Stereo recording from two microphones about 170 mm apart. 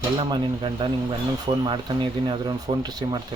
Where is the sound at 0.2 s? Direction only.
30° right (ahead or behind).